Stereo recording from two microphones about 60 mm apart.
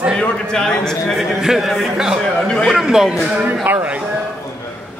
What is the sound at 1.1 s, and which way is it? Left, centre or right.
A man's voice, centre.